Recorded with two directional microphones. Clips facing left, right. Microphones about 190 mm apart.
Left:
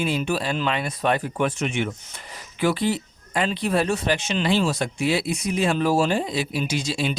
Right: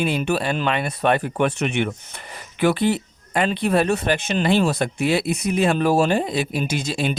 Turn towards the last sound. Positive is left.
turn(degrees=-55)  # may be behind; listen again after turning